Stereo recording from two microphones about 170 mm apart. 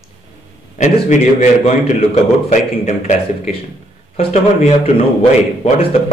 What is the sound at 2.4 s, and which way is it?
Speech, 40° left (ahead or behind).